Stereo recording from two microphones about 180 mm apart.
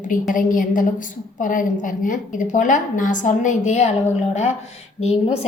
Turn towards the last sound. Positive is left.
turn(degrees=35)  # may be behind; listen again after turning